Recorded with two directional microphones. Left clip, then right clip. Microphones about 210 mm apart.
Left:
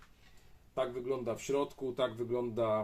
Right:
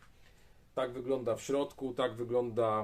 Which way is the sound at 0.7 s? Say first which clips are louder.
Right 1 dB; 20° right (ahead or behind).